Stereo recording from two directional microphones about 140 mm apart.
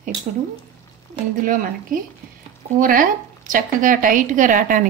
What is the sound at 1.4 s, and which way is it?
Speech, 75° right (ahead or behind).